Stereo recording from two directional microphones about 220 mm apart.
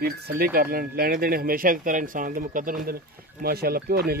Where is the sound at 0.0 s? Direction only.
45° right (ahead or behind).